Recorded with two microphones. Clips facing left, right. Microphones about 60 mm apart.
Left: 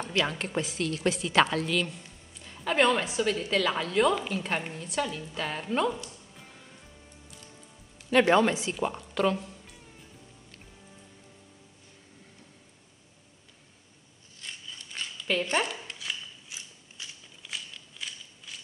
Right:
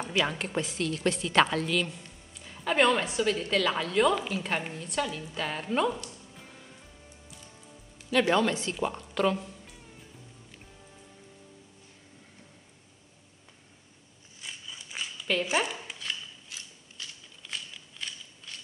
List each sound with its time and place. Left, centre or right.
0.0 s a woman's voice: centre
6.3 s music: centre
8.1 s speech: left
8.7 s speech: centre
14.4 s a sound: centre
15.4 s zipper: centre
16.4 s mechanisms: centre
17.4 s a sound: centre
17.9 s scissors: centre